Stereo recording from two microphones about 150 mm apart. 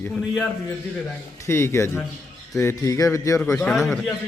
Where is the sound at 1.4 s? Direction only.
15° left (ahead or behind).